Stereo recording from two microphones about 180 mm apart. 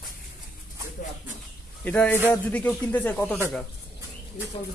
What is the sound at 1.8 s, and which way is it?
Speech, 10° left (ahead or behind).